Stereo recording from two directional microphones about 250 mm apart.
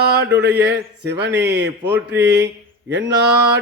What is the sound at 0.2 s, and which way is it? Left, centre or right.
Speech, right.